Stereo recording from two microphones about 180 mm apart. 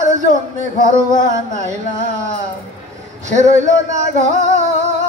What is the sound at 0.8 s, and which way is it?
Music, 40° right (ahead or behind).